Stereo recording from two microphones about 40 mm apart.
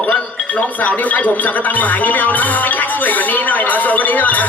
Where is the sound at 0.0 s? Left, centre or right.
Left.